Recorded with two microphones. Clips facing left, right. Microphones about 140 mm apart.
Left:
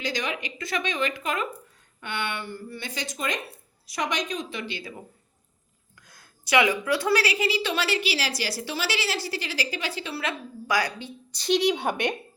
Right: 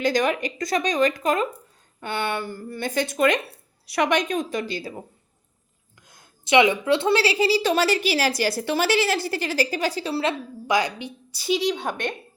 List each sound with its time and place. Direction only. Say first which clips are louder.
0.0 s a woman's voice: right 9 dB; 50° right (ahead or behind)
6.0 s a woman's voice: right 2 dB; 20° right (ahead or behind)
11.3 s a woman's voice: left 1 dB; 5° right (ahead or behind)
11.7 s speech: left 1 dB; 10° left (ahead or behind)